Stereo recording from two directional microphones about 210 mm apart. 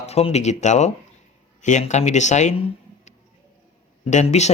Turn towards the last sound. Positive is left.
turn(degrees=30)  # may be behind; listen again after turning